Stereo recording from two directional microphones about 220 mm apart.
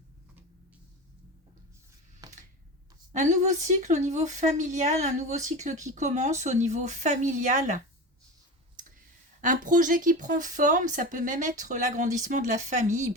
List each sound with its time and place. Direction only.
2.2 s a sound: 15° right (ahead or behind)
3.1 s speech: 35° right (ahead or behind)
9.4 s speech: 35° right (ahead or behind)